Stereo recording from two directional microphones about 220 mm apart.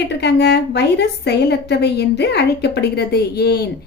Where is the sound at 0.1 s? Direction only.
50° left (ahead or behind).